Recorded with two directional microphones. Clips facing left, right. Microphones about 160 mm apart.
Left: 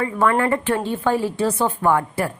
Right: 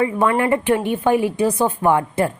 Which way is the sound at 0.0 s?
20° right (ahead or behind).